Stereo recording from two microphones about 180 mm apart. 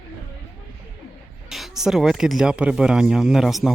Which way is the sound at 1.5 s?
Centre (ahead or behind).